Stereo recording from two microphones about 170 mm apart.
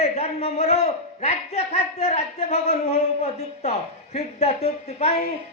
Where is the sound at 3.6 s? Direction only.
40° left (ahead or behind).